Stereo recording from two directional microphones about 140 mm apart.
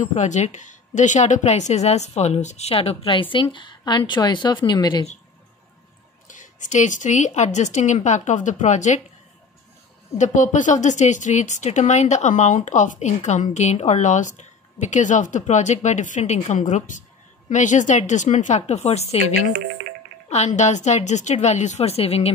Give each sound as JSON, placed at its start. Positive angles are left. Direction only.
{"t": 0.0, "sound": "a woman's voice", "side_deg": 55}
{"t": 6.2, "sound": "speech", "side_deg": 65}
{"t": 10.1, "sound": "speech", "side_deg": 60}